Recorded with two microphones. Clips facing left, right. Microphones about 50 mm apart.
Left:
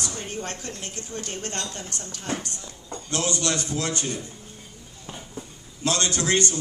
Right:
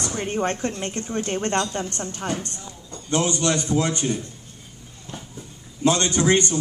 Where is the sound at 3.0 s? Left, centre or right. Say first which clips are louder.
Right 5 dB; right.